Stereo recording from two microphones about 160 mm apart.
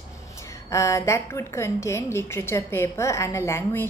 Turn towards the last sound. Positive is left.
turn(degrees=15)  # may be behind; listen again after turning